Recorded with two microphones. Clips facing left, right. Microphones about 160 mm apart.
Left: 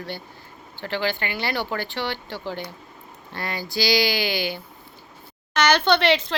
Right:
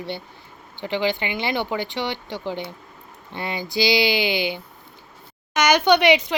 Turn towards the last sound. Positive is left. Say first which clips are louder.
# right 3 dB
turn(degrees=-15)  # may be behind; listen again after turning